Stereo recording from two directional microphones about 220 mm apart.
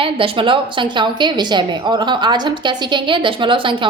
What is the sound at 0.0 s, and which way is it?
A woman's voice, 25° right (ahead or behind).